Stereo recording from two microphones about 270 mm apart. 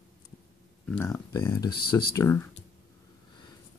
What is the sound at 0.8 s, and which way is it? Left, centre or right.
Speech, centre.